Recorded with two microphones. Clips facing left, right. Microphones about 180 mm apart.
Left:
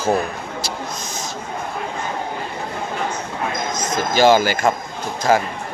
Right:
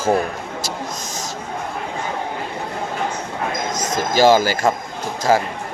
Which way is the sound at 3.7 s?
40° right (ahead or behind).